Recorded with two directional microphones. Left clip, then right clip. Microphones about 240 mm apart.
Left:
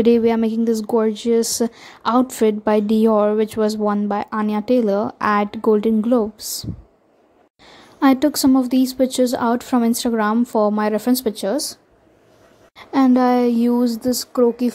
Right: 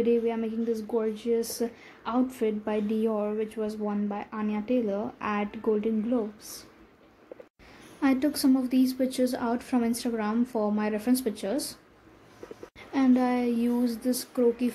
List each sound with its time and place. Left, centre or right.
0.0 s a woman's voice: left
8.0 s a woman's voice: left